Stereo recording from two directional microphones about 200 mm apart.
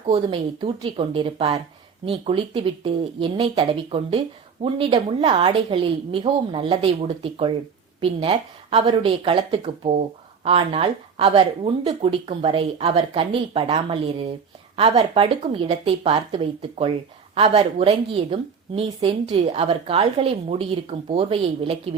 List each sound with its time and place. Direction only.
0.1 s a woman's voice: 25° right (ahead or behind)